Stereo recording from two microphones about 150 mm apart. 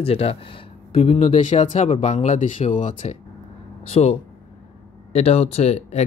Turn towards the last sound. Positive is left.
turn(degrees=45)  # may be behind; listen again after turning